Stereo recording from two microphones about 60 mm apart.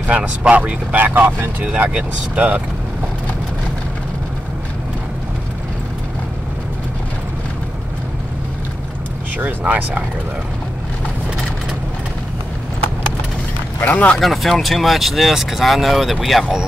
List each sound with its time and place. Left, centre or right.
0.0 s speech: centre
0.9 s speech: right
2.0 s speech: right
9.4 s speech: right
13.7 s speech: left
14.2 s speech: centre